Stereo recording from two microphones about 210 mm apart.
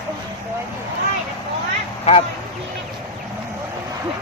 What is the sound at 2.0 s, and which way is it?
Speech, 30° left (ahead or behind).